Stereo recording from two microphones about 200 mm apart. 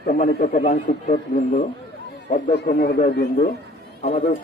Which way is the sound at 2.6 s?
50° left (ahead or behind).